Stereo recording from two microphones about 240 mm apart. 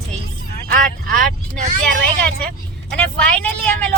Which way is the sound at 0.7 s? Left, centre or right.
Right.